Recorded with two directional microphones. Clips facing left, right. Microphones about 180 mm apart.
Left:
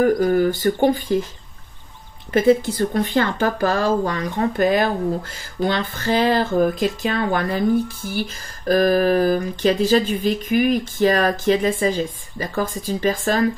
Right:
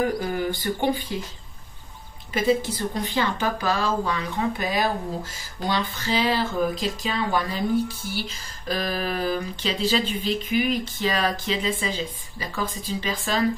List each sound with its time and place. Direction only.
0.0 s speech: 45° left (ahead or behind)
2.3 s speech: 55° left (ahead or behind)